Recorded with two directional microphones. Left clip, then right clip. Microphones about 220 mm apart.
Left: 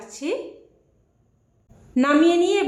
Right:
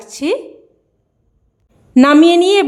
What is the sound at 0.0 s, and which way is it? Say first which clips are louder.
Speech: right 9 dB; 50° right (ahead or behind).